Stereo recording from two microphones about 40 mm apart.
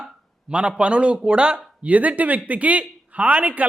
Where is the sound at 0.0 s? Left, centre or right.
Right.